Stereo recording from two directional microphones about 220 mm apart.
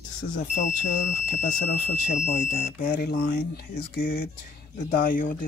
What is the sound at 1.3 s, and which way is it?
Speech, 35° left (ahead or behind).